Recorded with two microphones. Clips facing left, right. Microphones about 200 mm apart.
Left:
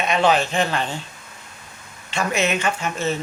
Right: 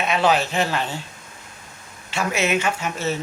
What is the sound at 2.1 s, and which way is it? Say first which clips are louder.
Speech: even; 5° right (ahead or behind).